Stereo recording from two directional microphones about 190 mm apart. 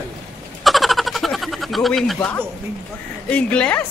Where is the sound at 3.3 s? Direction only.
5° left (ahead or behind).